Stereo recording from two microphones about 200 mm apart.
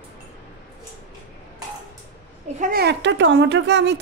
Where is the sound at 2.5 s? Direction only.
45° right (ahead or behind); by 4.0 s 60° right (ahead or behind).